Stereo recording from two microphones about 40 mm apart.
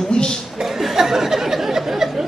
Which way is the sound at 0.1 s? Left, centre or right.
Left.